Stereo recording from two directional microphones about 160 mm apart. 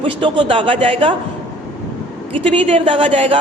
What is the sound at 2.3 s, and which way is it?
A man's voice, 35° right (ahead or behind).